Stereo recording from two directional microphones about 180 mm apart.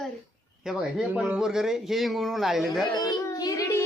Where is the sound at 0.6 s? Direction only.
5° right (ahead or behind).